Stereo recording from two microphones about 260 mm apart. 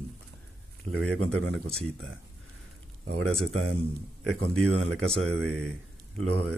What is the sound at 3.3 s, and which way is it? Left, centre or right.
Speech, centre.